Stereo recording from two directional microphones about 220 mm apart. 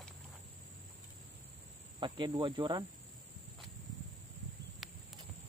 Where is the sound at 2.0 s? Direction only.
20° right (ahead or behind).